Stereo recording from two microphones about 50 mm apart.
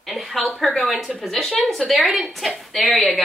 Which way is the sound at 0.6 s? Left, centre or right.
Centre.